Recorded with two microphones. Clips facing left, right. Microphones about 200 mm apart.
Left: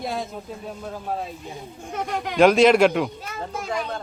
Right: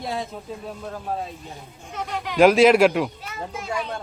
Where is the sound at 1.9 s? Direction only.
50° left (ahead or behind).